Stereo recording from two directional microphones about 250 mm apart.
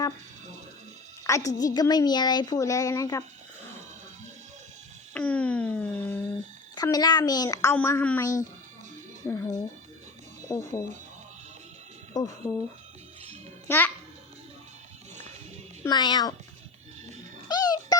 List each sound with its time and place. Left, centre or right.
1.2 s a woman's voice: centre
5.1 s a sound: centre
6.7 s a woman's voice: centre
12.1 s a woman's voice: centre
13.7 s a child's voice: centre
15.8 s a woman's voice: centre
17.5 s music: centre